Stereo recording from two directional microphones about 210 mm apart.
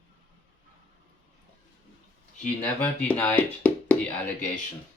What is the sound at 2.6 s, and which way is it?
Speech, 10° left (ahead or behind).